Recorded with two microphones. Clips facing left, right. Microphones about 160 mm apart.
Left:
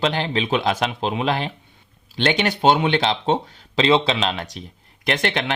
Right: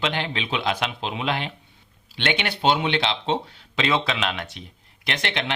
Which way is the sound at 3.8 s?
30° left (ahead or behind).